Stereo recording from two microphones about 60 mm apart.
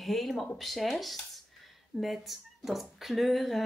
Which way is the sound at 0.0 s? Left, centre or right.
Centre.